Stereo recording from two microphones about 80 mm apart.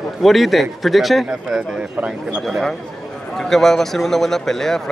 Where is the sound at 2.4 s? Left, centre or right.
Centre.